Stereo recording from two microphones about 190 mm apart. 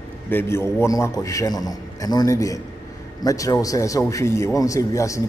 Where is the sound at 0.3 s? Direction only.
10° left (ahead or behind).